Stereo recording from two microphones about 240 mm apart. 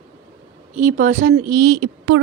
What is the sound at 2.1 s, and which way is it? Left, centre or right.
Speech, right.